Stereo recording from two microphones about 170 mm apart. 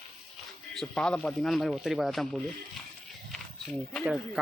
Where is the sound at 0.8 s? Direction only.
5° left (ahead or behind).